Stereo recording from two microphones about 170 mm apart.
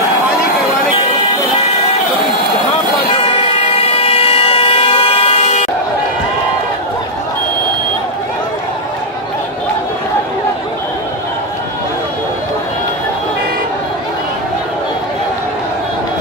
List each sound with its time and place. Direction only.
3.2 s siren: 30° left (ahead or behind)